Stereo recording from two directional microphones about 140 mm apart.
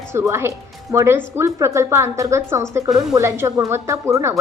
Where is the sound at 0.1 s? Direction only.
20° right (ahead or behind).